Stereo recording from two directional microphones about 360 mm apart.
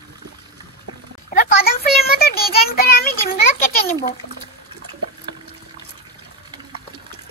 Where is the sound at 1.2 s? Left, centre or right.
Left.